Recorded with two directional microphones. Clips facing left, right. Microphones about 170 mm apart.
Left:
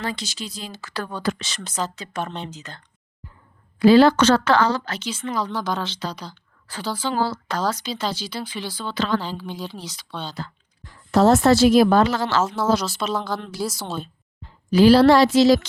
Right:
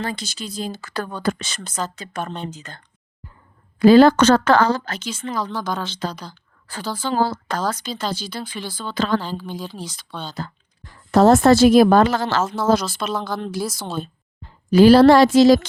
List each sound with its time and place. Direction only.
0.0 s speech: 50° right (ahead or behind)
5.5 s speech: centre (ahead or behind)
6.0 s speech: 50° right (ahead or behind)
13.1 s speech: 5° left (ahead or behind)
14.7 s speech: 50° right (ahead or behind)